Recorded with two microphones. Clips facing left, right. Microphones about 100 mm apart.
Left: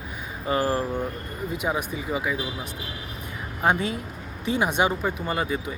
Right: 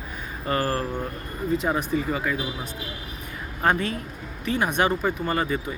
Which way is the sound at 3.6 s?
15° left (ahead or behind).